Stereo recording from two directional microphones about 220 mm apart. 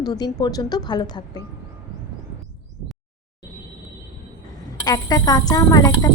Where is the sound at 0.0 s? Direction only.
20° left (ahead or behind).